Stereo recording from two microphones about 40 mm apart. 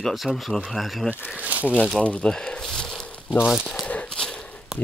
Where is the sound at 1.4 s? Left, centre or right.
Right.